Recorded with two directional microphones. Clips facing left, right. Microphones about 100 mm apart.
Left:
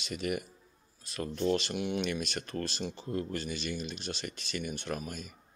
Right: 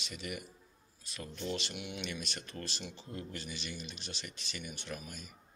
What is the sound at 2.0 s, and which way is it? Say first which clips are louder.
Speech: left 8 dB; 60° left (ahead or behind).